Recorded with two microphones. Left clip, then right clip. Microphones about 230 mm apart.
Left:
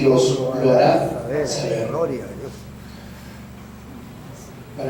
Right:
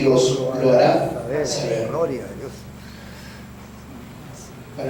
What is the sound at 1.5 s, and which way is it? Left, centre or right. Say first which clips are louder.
Speech: even; centre.